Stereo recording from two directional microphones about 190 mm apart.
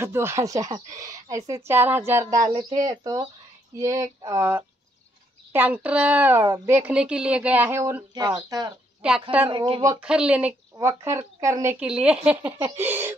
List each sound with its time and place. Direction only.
0.0 s speech: 15° right (ahead or behind)
9.0 s speech: 5° right (ahead or behind)
9.5 s speech: 25° right (ahead or behind)
9.9 s speech: 5° right (ahead or behind)